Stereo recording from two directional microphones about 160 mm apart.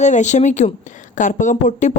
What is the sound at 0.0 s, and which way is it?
Speech, 50° left (ahead or behind).